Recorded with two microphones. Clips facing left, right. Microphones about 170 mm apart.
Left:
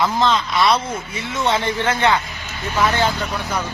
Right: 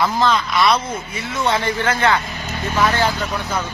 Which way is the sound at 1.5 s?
25° left (ahead or behind).